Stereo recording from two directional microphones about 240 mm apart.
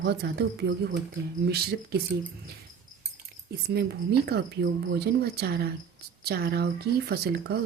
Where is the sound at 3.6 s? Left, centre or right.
Right.